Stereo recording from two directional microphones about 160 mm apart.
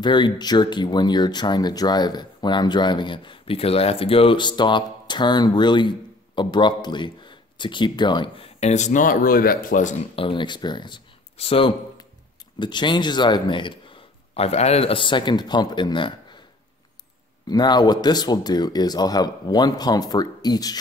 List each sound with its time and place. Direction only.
0.0 s speech: 30° left (ahead or behind)
8.5 s speech: 45° left (ahead or behind)
10.1 s speech: 30° left (ahead or behind)
17.5 s speech: 25° left (ahead or behind)